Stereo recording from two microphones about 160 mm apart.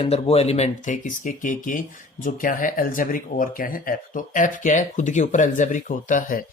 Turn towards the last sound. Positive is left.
turn(degrees=55)  # may be behind; listen again after turning